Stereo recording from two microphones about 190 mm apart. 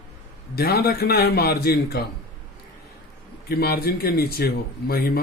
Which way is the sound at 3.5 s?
55° left (ahead or behind).